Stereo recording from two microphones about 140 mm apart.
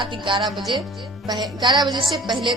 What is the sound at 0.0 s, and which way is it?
A woman's voice, 35° right (ahead or behind).